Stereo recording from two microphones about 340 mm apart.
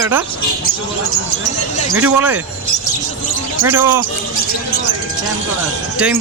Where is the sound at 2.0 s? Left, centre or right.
Centre.